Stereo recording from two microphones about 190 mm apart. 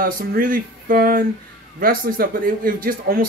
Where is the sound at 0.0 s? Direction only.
45° right (ahead or behind).